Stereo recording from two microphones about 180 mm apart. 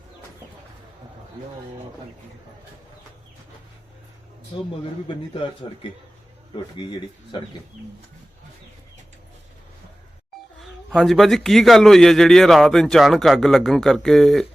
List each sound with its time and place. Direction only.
4.5 s a man's voice: 30° left (ahead or behind)
10.6 s speech: centre (ahead or behind)